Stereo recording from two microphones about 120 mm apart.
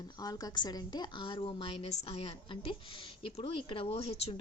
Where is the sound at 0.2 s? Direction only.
30° left (ahead or behind).